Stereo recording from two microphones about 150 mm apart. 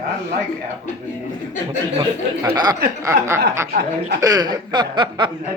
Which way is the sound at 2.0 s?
25° right (ahead or behind).